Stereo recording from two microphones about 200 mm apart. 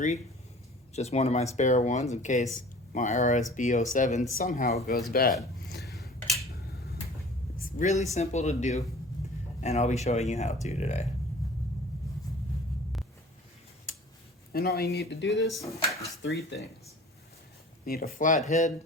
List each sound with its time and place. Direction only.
0.9 s speech: 35° left (ahead or behind); by 5.3 s 50° left (ahead or behind)
5.6 s a sound: 50° left (ahead or behind)
7.6 s a sound: 35° left (ahead or behind)
8.1 s speech: 35° left (ahead or behind)
14.5 s speech: 50° left (ahead or behind)
15.4 s speech: centre (ahead or behind)
16.2 s speech: 60° left (ahead or behind)
17.8 s speech: 50° left (ahead or behind)